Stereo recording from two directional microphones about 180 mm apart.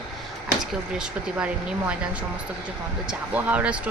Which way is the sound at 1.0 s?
5° right (ahead or behind).